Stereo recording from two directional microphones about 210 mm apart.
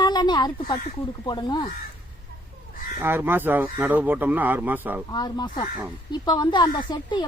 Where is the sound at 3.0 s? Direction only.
10° right (ahead or behind).